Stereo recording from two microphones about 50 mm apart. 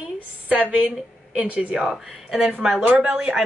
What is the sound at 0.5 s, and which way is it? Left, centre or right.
A woman's voice, right.